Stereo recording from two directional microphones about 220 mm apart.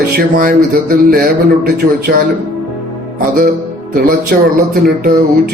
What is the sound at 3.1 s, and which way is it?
Speech, 40° right (ahead or behind).